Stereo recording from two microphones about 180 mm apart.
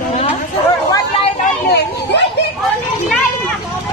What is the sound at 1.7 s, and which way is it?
Children playing, 70° left (ahead or behind).